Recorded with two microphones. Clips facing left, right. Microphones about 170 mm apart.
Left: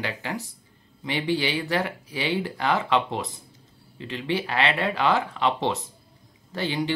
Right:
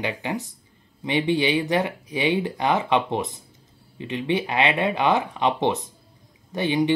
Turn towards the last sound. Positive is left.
turn(degrees=-20)  # may be behind; listen again after turning